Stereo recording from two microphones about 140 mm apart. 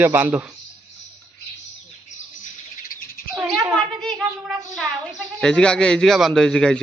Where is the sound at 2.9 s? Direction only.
90° left.